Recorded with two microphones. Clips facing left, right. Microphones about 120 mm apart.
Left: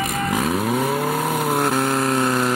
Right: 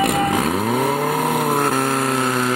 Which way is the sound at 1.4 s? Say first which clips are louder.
Right 1 dB; 5° right (ahead or behind).